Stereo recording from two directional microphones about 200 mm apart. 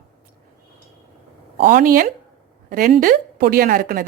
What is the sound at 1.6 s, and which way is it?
A woman's voice, 45° right (ahead or behind).